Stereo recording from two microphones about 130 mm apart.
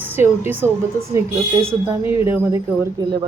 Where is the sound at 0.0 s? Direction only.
15° right (ahead or behind).